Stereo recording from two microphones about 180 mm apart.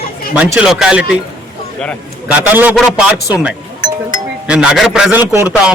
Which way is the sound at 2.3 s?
5° right (ahead or behind).